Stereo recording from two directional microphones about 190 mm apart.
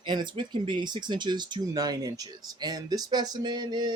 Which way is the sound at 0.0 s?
25° right (ahead or behind).